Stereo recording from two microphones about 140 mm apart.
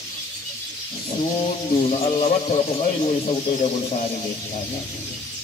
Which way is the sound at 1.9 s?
50° left (ahead or behind).